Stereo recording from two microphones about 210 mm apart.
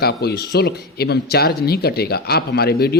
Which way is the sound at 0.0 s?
50° left (ahead or behind).